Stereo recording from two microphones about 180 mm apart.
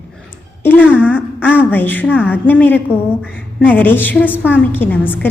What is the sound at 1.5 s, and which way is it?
A woman's voice, 10° left (ahead or behind).